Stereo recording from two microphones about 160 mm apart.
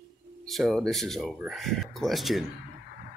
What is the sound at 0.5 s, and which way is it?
Speech, centre (ahead or behind).